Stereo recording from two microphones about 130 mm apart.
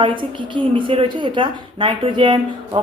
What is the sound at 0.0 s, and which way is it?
Speech, 40° right (ahead or behind).